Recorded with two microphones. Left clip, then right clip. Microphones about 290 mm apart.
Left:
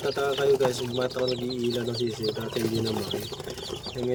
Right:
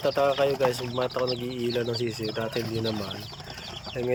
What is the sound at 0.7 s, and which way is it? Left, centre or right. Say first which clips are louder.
Speech: even; centre.